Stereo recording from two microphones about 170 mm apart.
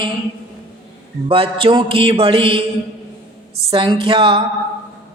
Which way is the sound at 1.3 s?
30° right (ahead or behind).